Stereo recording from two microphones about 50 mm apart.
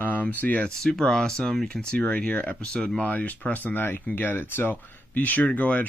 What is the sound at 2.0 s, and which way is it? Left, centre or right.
Speech, left.